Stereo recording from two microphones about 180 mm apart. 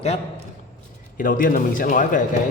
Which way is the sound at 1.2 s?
50° left (ahead or behind).